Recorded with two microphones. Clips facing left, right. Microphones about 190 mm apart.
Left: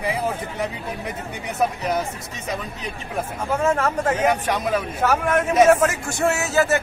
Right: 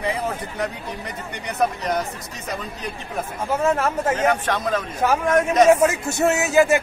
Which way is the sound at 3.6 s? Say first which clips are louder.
Even; 10° right (ahead or behind).